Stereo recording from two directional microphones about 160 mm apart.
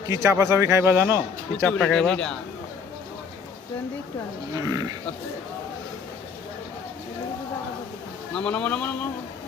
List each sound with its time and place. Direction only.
0.1 s speech: 20° right (ahead or behind)
1.6 s speech: 5° left (ahead or behind)
4.5 s speech: 20° right (ahead or behind)
8.4 s a man's voice: 5° left (ahead or behind)